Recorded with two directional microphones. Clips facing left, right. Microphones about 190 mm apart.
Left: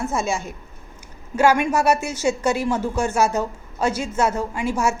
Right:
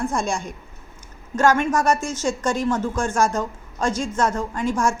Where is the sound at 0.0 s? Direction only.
5° left (ahead or behind).